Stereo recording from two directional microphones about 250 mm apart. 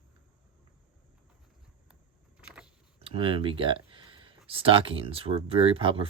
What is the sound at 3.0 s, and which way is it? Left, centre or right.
Speech, right.